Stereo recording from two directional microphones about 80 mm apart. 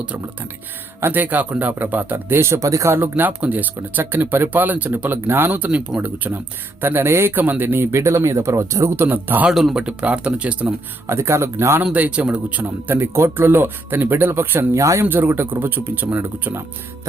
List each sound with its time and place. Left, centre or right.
1.0 s speech: right
9.5 s speech: centre
11.0 s speech: right
11.8 s speech: centre
14.8 s speech: right
15.0 s speech: right